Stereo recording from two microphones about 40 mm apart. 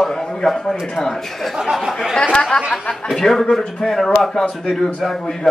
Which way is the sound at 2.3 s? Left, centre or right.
Left.